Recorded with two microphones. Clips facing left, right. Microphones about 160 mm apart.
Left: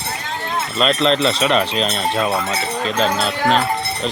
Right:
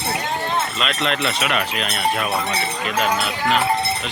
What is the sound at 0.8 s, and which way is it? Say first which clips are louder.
Speech: left 6 dB; 35° left (ahead or behind).